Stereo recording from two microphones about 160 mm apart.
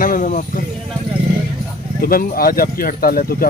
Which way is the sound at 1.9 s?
65° left (ahead or behind).